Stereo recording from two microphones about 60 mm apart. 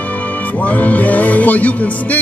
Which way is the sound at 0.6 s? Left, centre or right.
Left.